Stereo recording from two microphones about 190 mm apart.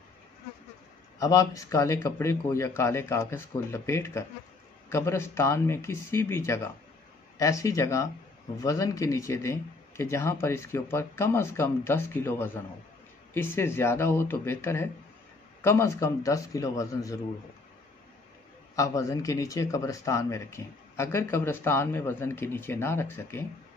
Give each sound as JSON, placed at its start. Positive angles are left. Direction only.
{"t": 1.2, "sound": "speech", "side_deg": 20}
{"t": 18.8, "sound": "speech", "side_deg": 15}